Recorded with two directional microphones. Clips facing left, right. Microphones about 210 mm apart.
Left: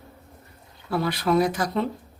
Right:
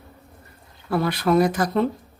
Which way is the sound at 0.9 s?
50° right (ahead or behind).